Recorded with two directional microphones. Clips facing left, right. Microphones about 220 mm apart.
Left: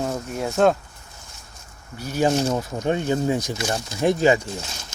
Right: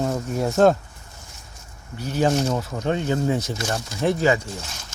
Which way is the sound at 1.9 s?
10° left (ahead or behind).